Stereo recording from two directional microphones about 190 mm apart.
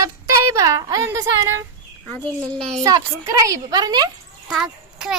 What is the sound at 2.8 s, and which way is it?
A woman's voice, 15° right (ahead or behind).